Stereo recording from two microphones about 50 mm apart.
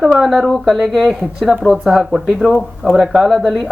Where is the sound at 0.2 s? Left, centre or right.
Centre.